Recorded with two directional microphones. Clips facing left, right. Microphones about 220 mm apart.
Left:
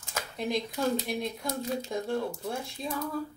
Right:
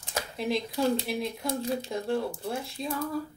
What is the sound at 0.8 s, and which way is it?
Speech, centre (ahead or behind).